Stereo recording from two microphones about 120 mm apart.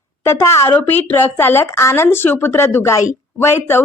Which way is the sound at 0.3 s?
20° left (ahead or behind).